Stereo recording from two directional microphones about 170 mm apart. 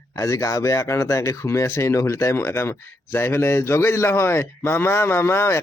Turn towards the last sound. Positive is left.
turn(degrees=15)  # may be behind; listen again after turning